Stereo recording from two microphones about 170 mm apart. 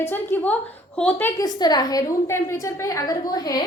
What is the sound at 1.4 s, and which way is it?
A woman's voice, 25° left (ahead or behind).